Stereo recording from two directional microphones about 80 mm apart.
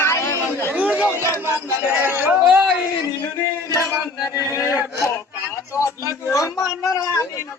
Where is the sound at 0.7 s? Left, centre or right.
Centre.